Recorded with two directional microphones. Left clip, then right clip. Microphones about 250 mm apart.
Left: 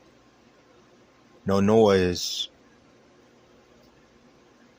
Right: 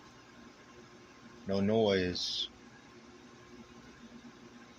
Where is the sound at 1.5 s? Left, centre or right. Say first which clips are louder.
Left 10 dB; left.